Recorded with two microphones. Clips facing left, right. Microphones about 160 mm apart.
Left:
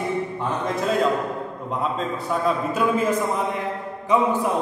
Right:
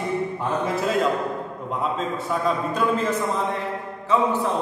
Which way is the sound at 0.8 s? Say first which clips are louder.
Left 3 dB; centre (ahead or behind).